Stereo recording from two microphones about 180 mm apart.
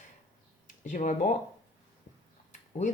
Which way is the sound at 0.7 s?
45° left (ahead or behind).